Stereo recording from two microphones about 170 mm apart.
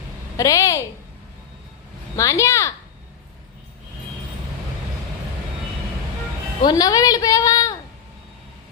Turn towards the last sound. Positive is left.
turn(degrees=20)  # may be behind; listen again after turning